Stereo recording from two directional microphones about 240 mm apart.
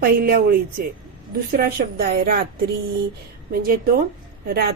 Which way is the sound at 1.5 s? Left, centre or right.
Right.